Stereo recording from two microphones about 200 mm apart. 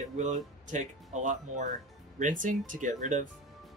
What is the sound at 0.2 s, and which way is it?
Speech, 40° right (ahead or behind).